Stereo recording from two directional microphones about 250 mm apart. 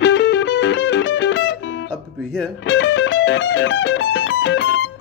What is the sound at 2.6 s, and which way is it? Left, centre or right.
Music, left.